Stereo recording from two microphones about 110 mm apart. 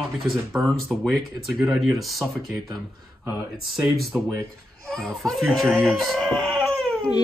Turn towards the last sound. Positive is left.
turn(degrees=5)  # may be behind; listen again after turning